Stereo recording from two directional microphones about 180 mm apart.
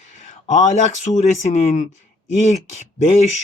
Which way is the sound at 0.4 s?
45° left (ahead or behind).